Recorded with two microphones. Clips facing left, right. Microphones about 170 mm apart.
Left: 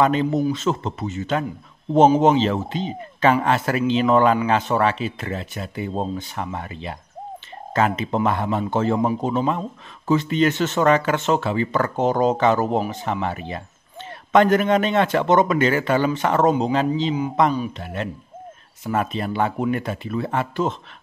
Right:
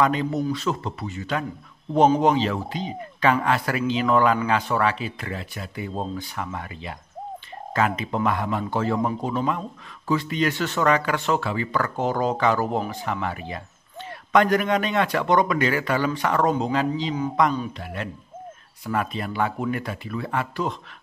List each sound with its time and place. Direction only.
0.0 s speech: 25° left (ahead or behind)